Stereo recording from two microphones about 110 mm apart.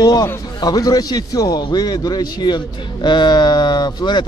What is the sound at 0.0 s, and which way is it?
A man's voice, 35° left (ahead or behind).